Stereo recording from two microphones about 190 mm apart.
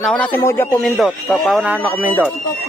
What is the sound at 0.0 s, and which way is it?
Speech, 5° left (ahead or behind).